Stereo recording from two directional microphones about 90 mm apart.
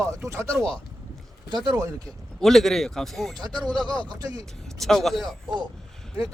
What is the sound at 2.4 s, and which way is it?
Speech, centre (ahead or behind).